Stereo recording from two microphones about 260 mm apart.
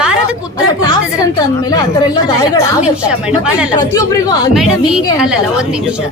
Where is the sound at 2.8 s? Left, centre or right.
Centre.